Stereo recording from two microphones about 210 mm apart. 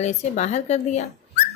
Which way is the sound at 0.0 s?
35° left (ahead or behind).